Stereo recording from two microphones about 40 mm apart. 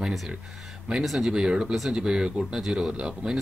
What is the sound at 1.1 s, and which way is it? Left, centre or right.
Speech, centre.